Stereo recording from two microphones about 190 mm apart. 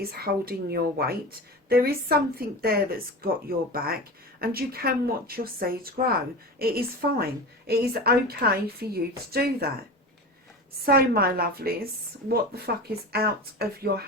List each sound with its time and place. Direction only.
0.0 s a woman's voice: 55° right (ahead or behind)
10.8 s a woman's voice: 55° right (ahead or behind)
13.1 s a woman's voice: 55° right (ahead or behind)